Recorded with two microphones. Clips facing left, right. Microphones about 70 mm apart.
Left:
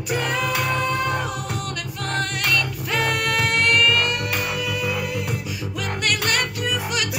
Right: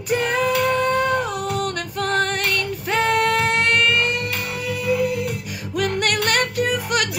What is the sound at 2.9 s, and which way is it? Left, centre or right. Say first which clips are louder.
Music: right 5 dB; right.